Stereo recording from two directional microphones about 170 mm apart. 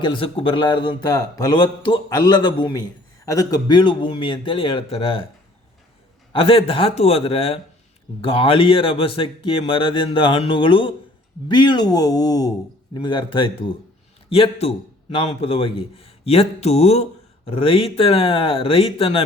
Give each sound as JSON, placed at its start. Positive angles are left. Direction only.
{"t": 0.0, "sound": "a man's voice", "side_deg": 30}
{"t": 6.3, "sound": "a man's voice", "side_deg": 35}